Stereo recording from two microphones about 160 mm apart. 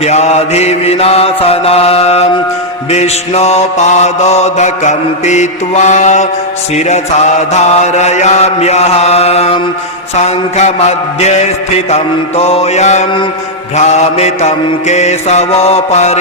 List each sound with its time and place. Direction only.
0.0 s mantra: 45° left (ahead or behind)